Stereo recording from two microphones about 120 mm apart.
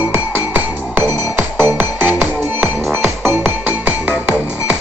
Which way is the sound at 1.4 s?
15° right (ahead or behind).